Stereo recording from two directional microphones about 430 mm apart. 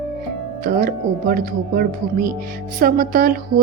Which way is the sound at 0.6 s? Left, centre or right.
Centre.